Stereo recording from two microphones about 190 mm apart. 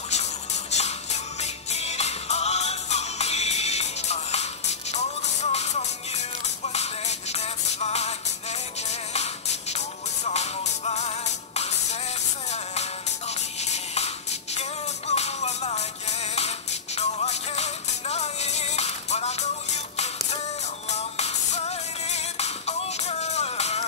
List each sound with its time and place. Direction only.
0.1 s music: 35° left (ahead or behind)